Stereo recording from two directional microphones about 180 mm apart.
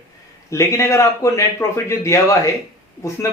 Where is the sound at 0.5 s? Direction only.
15° left (ahead or behind).